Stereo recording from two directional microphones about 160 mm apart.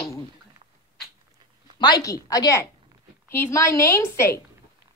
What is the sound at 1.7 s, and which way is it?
A child's voice, 25° left (ahead or behind).